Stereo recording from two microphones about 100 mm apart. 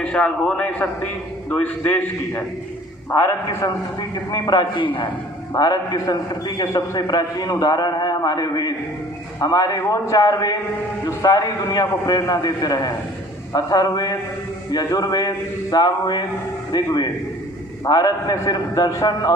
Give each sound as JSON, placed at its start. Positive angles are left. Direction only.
{"t": 0.0, "sound": "a man's voice", "side_deg": 10}
{"t": 4.1, "sound": "a man's voice", "side_deg": 45}